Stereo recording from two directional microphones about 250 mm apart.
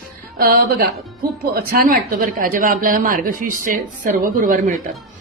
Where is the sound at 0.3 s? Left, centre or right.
Right.